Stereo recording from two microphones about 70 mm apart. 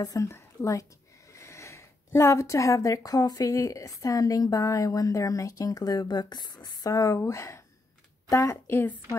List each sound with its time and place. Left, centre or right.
0.0 s a woman's voice: left
0.3 s speech: left
6.9 s speech: left